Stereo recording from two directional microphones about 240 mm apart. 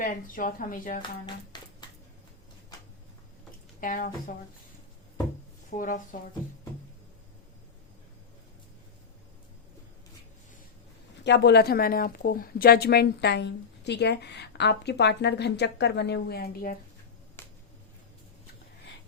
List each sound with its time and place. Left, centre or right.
0.0 s speech: left
1.8 s a sound: centre
3.8 s a woman's voice: left
5.7 s speech: left
11.2 s a woman's voice: left
17.4 s finger snapping: centre